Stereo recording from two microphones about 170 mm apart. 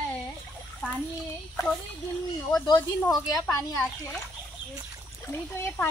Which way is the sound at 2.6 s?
20° left (ahead or behind).